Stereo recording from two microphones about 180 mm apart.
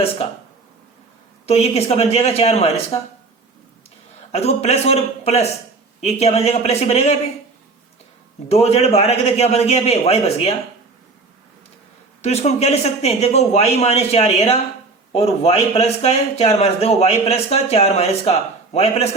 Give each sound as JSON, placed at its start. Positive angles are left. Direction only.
{"t": 1.5, "sound": "a man's voice", "side_deg": 35}
{"t": 4.3, "sound": "a man's voice", "side_deg": 35}
{"t": 8.4, "sound": "a man's voice", "side_deg": 35}
{"t": 12.2, "sound": "a man's voice", "side_deg": 35}